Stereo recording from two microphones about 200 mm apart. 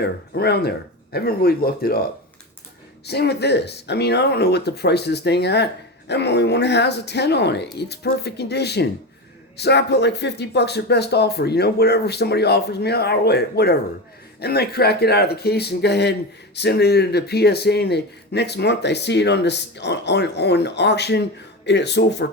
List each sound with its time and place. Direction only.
0.0 s speech: 55° left (ahead or behind)
3.1 s speech: 55° left (ahead or behind)